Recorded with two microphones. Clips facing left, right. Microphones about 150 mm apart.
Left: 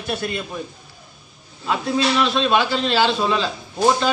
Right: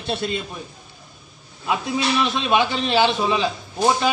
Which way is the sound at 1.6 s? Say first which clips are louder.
Left 2 dB; 15° right (ahead or behind).